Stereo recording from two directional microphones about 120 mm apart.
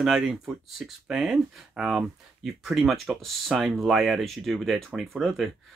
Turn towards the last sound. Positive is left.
turn(degrees=0)  # may be behind; listen again after turning